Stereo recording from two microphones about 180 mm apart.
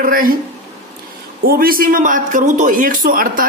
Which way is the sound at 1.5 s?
55° right (ahead or behind).